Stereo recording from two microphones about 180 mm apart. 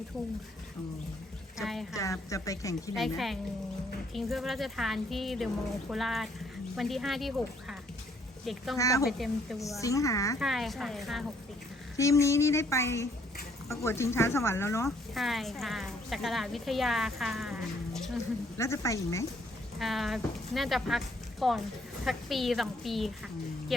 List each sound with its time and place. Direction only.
1.5 s a woman's voice: centre (ahead or behind)
2.3 s speech: 20° left (ahead or behind)
4.1 s a woman's voice: centre (ahead or behind)
8.8 s speech: 20° left (ahead or behind)
9.0 s a woman's voice: centre (ahead or behind)
9.8 s speech: 20° left (ahead or behind)
10.4 s a woman's voice: centre (ahead or behind)
11.9 s speech: 15° left (ahead or behind)
14.8 s a woman's voice: centre (ahead or behind)
18.5 s speech: 15° left (ahead or behind)
19.8 s a woman's voice: centre (ahead or behind)